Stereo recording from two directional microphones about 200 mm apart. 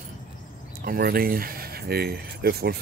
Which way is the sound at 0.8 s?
45° right (ahead or behind).